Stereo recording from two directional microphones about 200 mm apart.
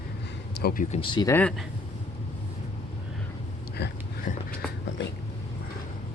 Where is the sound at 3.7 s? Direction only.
55° left (ahead or behind).